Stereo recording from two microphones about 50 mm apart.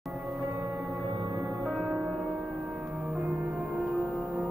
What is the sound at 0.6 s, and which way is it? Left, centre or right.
Music, right.